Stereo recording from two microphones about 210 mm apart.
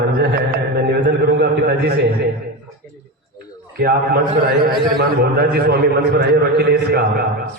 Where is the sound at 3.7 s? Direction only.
45° right (ahead or behind).